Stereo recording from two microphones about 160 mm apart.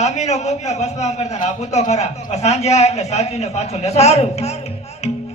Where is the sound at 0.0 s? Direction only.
45° left (ahead or behind).